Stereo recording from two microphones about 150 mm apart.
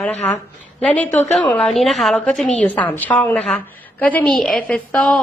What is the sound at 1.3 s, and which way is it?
A woman's voice, 5° left (ahead or behind).